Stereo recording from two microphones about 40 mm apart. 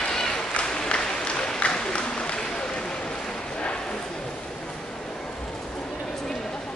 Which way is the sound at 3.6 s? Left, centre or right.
Left.